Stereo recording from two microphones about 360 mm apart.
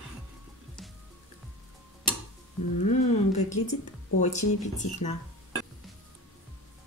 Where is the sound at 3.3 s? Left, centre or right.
Centre.